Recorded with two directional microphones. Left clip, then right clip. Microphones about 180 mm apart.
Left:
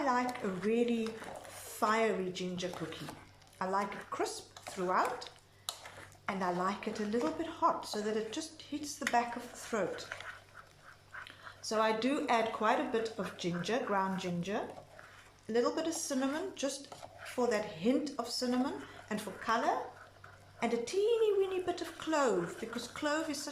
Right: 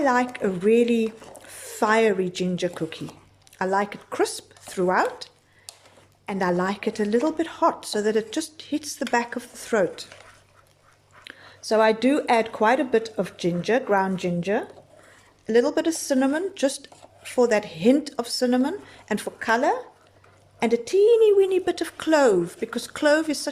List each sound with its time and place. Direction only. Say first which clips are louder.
0.0 s speech: right 11 dB; 60° right (ahead or behind)
5.7 s a sound: left 3 dB; 10° right (ahead or behind)
6.2 s speech: right 10 dB; 55° right (ahead or behind)
11.3 s speech: right 15 dB; 55° right (ahead or behind)